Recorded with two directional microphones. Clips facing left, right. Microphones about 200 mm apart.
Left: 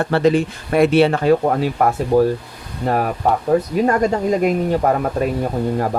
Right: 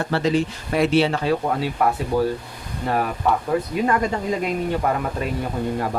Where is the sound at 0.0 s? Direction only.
55° left (ahead or behind).